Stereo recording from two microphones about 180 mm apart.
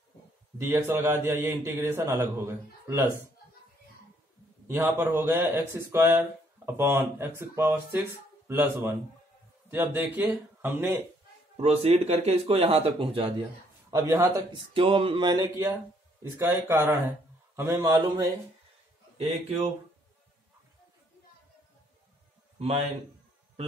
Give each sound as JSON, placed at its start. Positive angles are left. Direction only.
{"t": 0.6, "sound": "a man's voice", "side_deg": -15}
{"t": 4.6, "sound": "a man's voice", "side_deg": -15}
{"t": 11.5, "sound": "speech", "side_deg": -35}
{"t": 13.8, "sound": "a man's voice", "side_deg": -15}
{"t": 14.7, "sound": "a man's voice", "side_deg": -30}
{"t": 19.1, "sound": "speech", "side_deg": -35}
{"t": 22.6, "sound": "a man's voice", "side_deg": -35}